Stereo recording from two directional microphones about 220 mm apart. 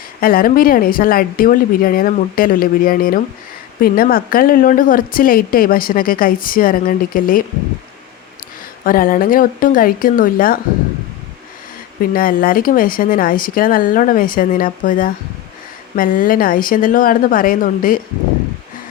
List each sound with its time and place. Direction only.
0.2 s a woman's voice: 40° left (ahead or behind)
8.8 s a woman's voice: 40° left (ahead or behind)
12.1 s a woman's voice: 40° left (ahead or behind)